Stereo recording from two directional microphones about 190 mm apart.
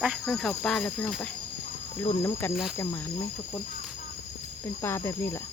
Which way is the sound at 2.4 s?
10° left (ahead or behind).